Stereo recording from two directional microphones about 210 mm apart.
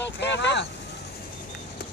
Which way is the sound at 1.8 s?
50° left (ahead or behind).